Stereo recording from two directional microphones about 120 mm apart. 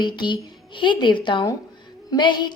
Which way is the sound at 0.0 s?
40° left (ahead or behind).